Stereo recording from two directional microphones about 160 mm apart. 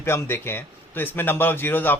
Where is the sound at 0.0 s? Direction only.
15° left (ahead or behind).